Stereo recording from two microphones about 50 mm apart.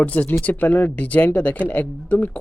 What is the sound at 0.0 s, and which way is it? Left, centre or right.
Speech, left.